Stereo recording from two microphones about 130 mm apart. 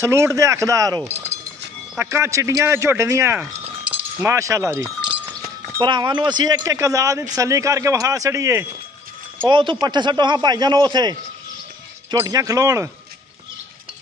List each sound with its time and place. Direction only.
0.0 s speech: 20° right (ahead or behind)
5.0 s speech: 35° right (ahead or behind)
9.4 s a man's voice: 40° right (ahead or behind)
12.2 s speech: 25° right (ahead or behind)